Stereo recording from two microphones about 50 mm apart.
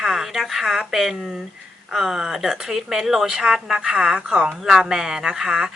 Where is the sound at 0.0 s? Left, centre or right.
Centre.